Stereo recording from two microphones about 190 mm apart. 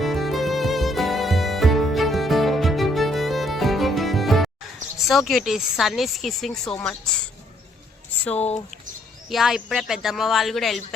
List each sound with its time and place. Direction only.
0.0 s music: centre (ahead or behind)
4.9 s speech: centre (ahead or behind)
8.4 s speech: 35° left (ahead or behind)
9.3 s speech: centre (ahead or behind)